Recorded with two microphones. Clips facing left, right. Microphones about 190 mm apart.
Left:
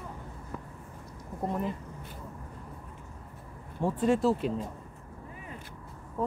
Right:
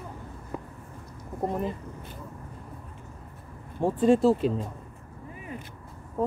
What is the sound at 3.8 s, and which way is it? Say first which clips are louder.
Speech: right 5 dB; 30° right (ahead or behind).